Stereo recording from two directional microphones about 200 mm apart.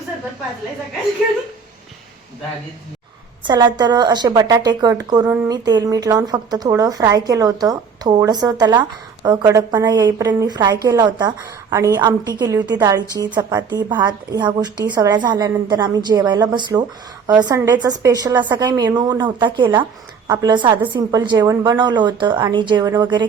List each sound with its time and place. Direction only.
3.4 s a woman's voice: 20° right (ahead or behind)